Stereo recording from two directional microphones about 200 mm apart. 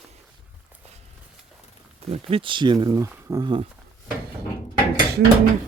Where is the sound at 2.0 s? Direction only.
30° right (ahead or behind).